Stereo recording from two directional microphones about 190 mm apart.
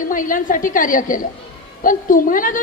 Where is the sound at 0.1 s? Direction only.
45° left (ahead or behind).